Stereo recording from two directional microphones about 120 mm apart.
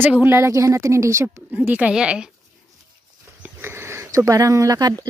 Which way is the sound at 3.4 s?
20° right (ahead or behind).